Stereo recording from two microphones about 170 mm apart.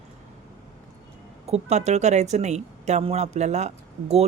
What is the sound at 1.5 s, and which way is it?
Speech, 40° right (ahead or behind).